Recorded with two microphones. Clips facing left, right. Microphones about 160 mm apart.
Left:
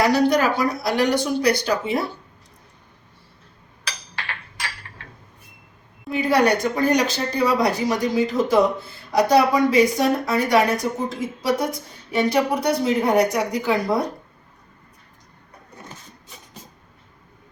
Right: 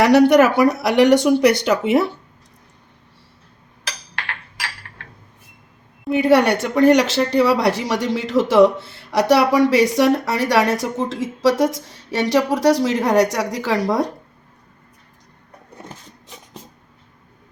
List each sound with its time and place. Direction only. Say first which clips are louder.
0.0 s speech: right 6 dB; 70° right (ahead or behind)
6.1 s speech: right 4 dB; 70° right (ahead or behind); by 14.1 s 90° right